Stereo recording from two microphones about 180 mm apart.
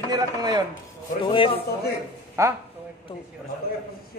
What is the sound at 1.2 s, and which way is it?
Speech, 30° left (ahead or behind).